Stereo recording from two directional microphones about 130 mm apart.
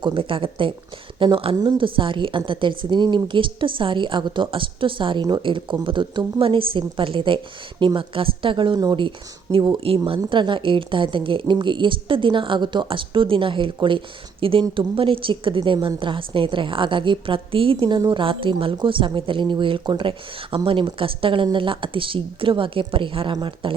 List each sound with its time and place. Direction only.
0.0 s a woman's voice: 40° right (ahead or behind)